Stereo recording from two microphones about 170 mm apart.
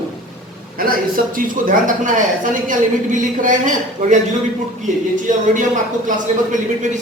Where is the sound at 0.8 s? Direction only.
60° right (ahead or behind).